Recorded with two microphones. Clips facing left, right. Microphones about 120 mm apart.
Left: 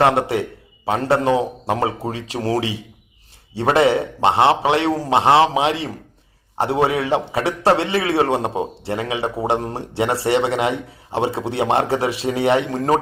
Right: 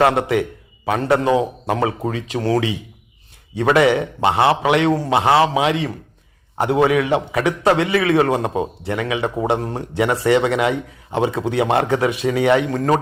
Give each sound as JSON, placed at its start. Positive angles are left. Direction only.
{"t": 0.0, "sound": "a man's voice", "side_deg": 30}